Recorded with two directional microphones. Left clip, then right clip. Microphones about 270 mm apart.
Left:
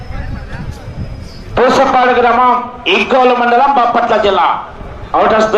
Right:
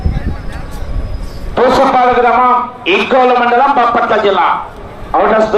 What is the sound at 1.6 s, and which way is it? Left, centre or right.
A man's voice, centre.